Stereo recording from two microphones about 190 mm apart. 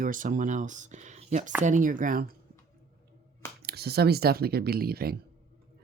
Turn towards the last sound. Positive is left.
turn(degrees=-55)  # may be behind; listen again after turning